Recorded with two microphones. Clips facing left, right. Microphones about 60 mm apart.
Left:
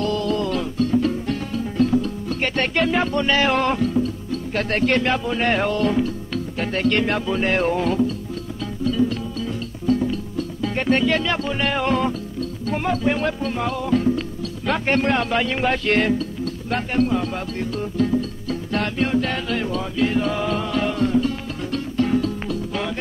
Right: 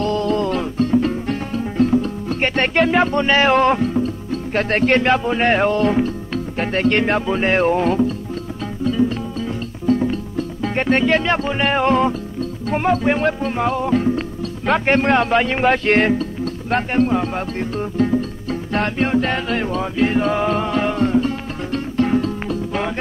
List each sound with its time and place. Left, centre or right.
0.0 s music: right
12.6 s speech: right
21.7 s music: right